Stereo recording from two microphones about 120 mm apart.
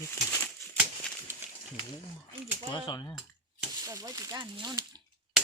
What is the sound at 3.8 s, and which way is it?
Speech, 30° right (ahead or behind).